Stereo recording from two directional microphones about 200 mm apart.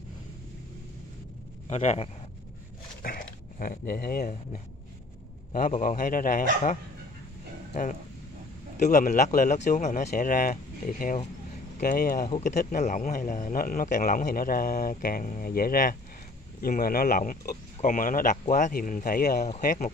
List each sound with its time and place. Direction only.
1.7 s speech: 35° left (ahead or behind)
3.0 s speech: 45° left (ahead or behind)
8.7 s speech: 40° left (ahead or behind)
12.3 s speech: 35° left (ahead or behind)